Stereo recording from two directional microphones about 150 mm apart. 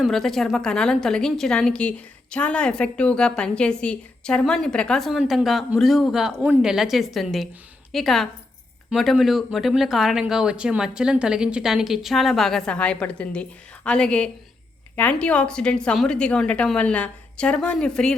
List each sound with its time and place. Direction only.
0.0 s a woman's voice: centre (ahead or behind)